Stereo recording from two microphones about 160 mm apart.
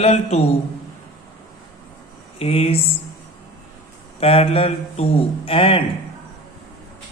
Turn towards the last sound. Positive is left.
turn(degrees=35)  # may be behind; listen again after turning